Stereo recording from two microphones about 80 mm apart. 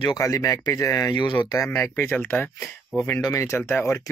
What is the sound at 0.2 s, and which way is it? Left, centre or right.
Speech, left.